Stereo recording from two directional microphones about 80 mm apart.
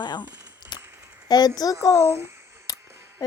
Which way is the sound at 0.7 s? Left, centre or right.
Left.